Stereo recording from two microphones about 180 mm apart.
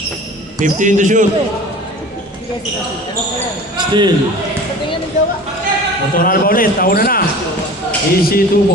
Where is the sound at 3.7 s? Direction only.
25° right (ahead or behind).